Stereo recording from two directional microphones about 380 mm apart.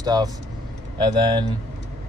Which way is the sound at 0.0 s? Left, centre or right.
Centre.